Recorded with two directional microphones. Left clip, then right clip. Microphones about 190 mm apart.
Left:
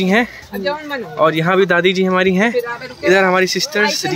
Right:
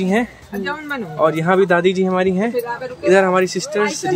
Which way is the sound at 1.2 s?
Centre (ahead or behind).